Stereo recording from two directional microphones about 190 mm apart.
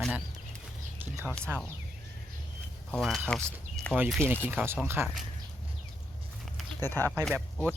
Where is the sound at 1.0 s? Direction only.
10° right (ahead or behind).